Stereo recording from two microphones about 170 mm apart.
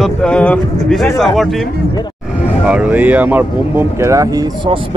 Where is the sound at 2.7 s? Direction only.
10° right (ahead or behind).